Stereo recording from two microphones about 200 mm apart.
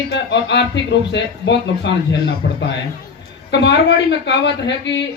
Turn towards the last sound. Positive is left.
turn(degrees=60)  # may be behind; listen again after turning